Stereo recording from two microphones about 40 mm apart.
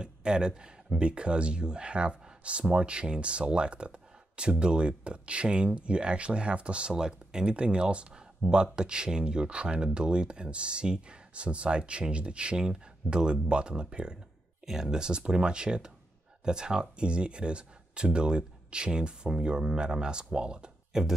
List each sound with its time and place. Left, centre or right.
0.0 s speech: right
6.9 s speech: centre
8.4 s speech: right
8.7 s speech: right